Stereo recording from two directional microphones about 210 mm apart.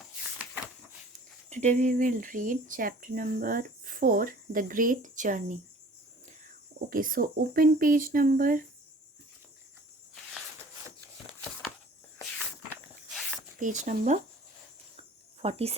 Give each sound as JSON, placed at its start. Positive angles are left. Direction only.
{"t": 1.5, "sound": "speech", "side_deg": -35}
{"t": 6.9, "sound": "speech", "side_deg": -40}
{"t": 13.6, "sound": "speech", "side_deg": -35}
{"t": 15.4, "sound": "speech", "side_deg": -30}